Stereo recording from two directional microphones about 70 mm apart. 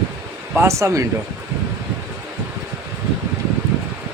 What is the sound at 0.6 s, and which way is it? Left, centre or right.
Speech, right.